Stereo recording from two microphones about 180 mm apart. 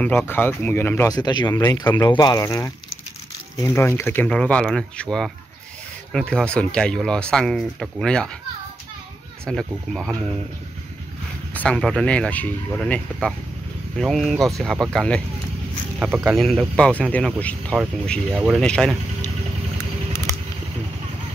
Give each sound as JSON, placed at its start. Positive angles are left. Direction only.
{"t": 0.0, "sound": "speech", "side_deg": 10}
{"t": 9.5, "sound": "speech", "side_deg": 5}
{"t": 11.5, "sound": "speech", "side_deg": 5}
{"t": 16.0, "sound": "speech", "side_deg": -10}
{"t": 16.4, "sound": "speech", "side_deg": 5}
{"t": 18.3, "sound": "speech", "side_deg": -10}
{"t": 18.6, "sound": "speech", "side_deg": 5}